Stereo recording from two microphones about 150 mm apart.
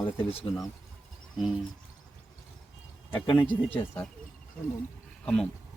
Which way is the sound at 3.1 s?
35° left (ahead or behind).